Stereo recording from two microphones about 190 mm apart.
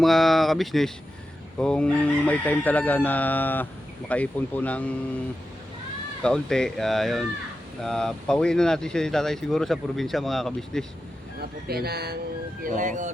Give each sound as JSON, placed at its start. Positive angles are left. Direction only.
{"t": 0.0, "sound": "a sound", "side_deg": 0}
{"t": 1.5, "sound": "speech", "side_deg": 5}
{"t": 6.2, "sound": "speech", "side_deg": 5}
{"t": 11.3, "sound": "speech", "side_deg": -55}
{"t": 12.6, "sound": "speech", "side_deg": -45}